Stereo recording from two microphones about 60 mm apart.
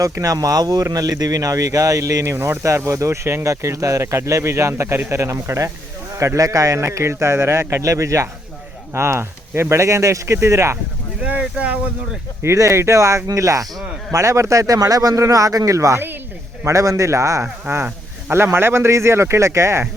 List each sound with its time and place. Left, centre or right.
0.0 s a man's voice: right
6.1 s a man's voice: right
8.9 s speech: right
11.2 s boat: right
12.5 s a man's voice: right
18.3 s speech: right